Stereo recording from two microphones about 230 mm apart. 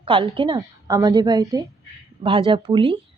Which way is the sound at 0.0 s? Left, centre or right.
Right.